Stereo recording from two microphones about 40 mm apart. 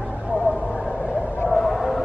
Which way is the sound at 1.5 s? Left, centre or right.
Centre.